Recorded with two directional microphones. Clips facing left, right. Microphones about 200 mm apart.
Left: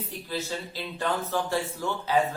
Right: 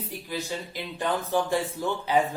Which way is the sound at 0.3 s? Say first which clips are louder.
Even; 15° right (ahead or behind).